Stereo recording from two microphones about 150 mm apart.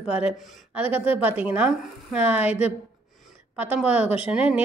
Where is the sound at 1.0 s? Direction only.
40° left (ahead or behind).